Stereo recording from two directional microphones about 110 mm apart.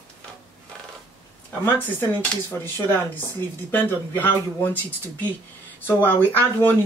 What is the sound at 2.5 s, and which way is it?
Speech, 20° left (ahead or behind).